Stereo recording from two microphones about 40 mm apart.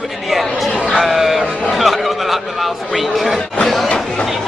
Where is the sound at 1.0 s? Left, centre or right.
Centre.